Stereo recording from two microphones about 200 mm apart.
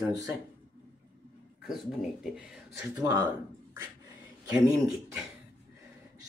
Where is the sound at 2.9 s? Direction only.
20° right (ahead or behind).